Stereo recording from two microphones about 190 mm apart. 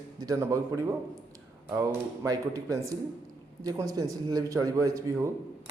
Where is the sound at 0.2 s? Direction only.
20° right (ahead or behind).